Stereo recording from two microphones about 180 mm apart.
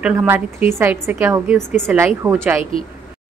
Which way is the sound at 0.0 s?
10° right (ahead or behind).